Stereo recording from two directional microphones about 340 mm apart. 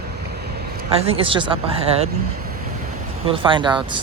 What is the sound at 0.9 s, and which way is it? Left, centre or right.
Speech, centre.